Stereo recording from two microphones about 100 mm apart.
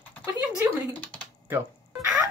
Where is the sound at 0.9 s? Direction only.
15° left (ahead or behind).